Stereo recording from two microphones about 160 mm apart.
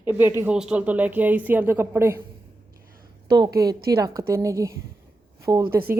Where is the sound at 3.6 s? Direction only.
20° right (ahead or behind).